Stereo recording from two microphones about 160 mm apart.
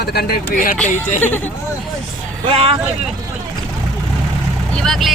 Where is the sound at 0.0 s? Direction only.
75° left (ahead or behind).